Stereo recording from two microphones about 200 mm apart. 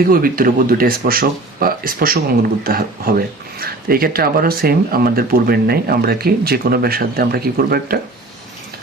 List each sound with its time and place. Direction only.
0.1 s speech: 45° right (ahead or behind)